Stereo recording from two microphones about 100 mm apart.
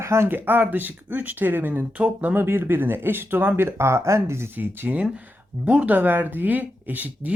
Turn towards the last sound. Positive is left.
turn(degrees=-15)  # may be behind; listen again after turning